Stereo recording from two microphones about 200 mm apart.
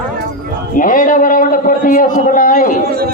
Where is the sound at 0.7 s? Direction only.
45° left (ahead or behind).